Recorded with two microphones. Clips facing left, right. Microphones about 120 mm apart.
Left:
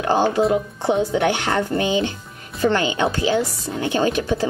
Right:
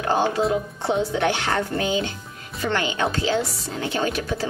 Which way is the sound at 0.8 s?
15° left (ahead or behind).